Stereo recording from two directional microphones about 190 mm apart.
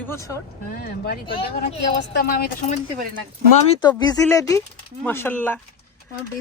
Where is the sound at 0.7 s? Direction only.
50° left (ahead or behind).